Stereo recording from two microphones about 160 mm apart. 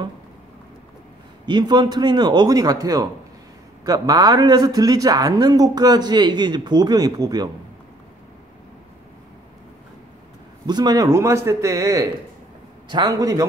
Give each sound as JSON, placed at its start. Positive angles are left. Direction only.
{"t": 1.4, "sound": "a man's voice", "side_deg": -25}
{"t": 10.7, "sound": "a man's voice", "side_deg": -25}